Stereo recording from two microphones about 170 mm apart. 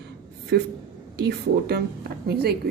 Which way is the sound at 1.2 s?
70° right (ahead or behind).